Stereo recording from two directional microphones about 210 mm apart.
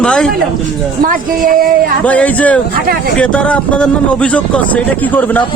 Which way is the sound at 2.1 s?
5° left (ahead or behind).